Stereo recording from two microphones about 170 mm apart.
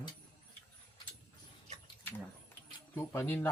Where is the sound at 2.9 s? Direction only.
10° left (ahead or behind).